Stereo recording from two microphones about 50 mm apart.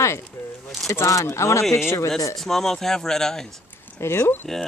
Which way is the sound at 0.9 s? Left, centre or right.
Left.